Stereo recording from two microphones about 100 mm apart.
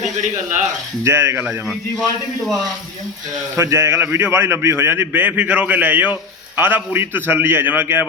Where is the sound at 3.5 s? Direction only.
25° right (ahead or behind).